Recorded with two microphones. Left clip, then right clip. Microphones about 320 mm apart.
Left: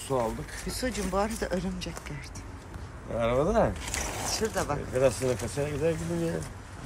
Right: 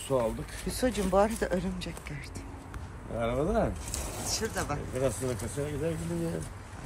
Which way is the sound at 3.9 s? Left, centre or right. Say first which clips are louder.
Left 4 dB; centre.